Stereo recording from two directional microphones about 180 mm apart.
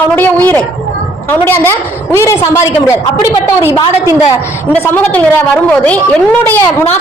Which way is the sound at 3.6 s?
15° right (ahead or behind).